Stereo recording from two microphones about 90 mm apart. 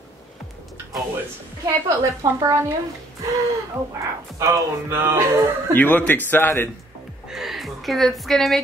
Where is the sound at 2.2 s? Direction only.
35° right (ahead or behind).